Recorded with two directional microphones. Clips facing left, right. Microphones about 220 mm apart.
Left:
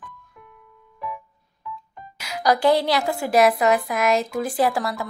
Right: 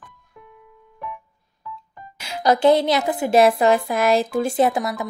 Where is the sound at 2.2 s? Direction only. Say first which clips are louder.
Right 2 dB; 25° right (ahead or behind).